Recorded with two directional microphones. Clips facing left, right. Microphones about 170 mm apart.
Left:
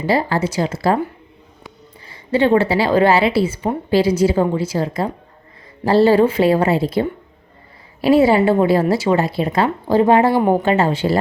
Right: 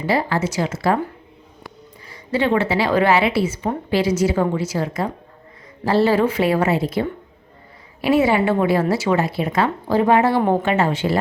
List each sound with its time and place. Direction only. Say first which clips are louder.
0.0 s speech: left 2 dB; 30° left (ahead or behind)
2.0 s speech: left 4 dB; 30° left (ahead or behind)